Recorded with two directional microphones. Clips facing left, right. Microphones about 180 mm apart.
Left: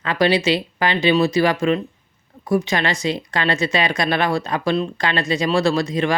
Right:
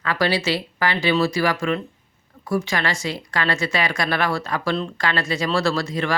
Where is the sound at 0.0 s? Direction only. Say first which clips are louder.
Left 4 dB; 20° left (ahead or behind).